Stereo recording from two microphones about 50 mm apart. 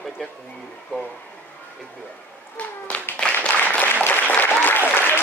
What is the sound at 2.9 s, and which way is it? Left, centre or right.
Speech, left.